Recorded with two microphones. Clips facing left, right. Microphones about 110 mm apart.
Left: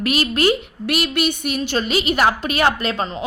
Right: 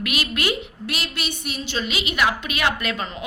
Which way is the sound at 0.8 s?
60° left (ahead or behind).